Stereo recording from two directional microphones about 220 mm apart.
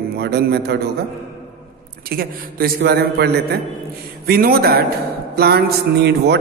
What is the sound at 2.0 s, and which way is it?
A man's voice, 45° right (ahead or behind).